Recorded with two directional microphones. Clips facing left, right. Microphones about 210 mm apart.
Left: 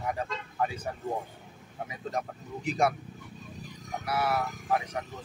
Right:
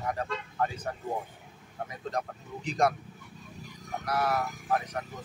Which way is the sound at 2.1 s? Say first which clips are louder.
Left 1 dB; 5° left (ahead or behind).